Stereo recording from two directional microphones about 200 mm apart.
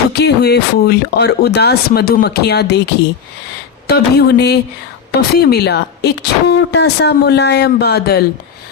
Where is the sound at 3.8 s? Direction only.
55° left (ahead or behind).